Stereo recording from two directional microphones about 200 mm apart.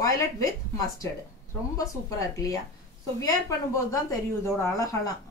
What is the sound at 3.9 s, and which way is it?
A woman's voice, 15° left (ahead or behind).